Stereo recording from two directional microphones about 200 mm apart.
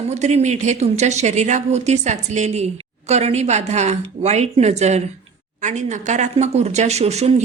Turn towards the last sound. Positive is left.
turn(degrees=-35)  # may be behind; listen again after turning